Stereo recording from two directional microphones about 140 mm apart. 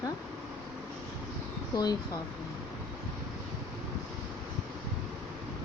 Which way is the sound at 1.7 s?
30° left (ahead or behind).